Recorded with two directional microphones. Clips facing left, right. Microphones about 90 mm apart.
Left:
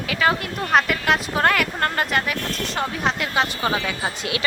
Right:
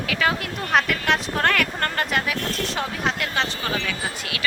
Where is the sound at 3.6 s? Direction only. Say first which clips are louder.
Left 3 dB; 20° left (ahead or behind).